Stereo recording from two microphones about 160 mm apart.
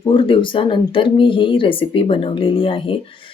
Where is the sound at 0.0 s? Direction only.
35° left (ahead or behind).